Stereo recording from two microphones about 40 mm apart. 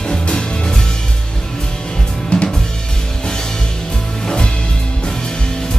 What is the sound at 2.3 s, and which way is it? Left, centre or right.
Drum kit, left.